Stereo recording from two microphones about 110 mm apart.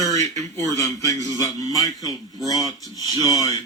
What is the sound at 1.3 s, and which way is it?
Speech, 30° left (ahead or behind).